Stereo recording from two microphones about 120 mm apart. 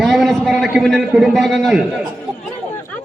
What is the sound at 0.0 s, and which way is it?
A man's voice, centre (ahead or behind).